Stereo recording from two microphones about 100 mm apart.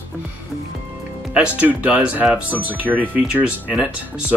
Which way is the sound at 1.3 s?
10° right (ahead or behind).